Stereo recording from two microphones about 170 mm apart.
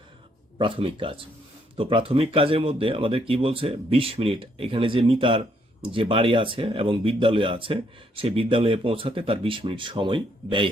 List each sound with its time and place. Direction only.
0.6 s speech: 30° right (ahead or behind)